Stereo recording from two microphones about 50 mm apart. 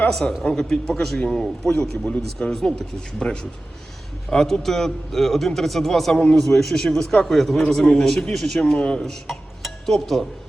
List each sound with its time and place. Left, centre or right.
0.1 s a man's voice: centre
1.7 s a man's voice: left
2.5 s a man's voice: centre
8.8 s a man's voice: centre
9.0 s speech: centre